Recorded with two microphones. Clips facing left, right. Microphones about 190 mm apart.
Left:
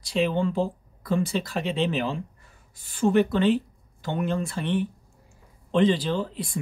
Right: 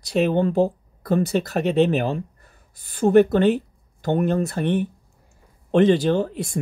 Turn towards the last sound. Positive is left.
turn(degrees=-45)  # may be behind; listen again after turning